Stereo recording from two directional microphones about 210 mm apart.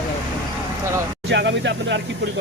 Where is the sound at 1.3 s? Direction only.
55° right (ahead or behind).